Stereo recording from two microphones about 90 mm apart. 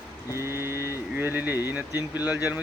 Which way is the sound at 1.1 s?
20° right (ahead or behind).